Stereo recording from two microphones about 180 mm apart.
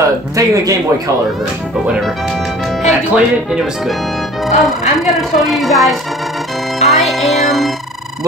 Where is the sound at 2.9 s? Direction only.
5° right (ahead or behind).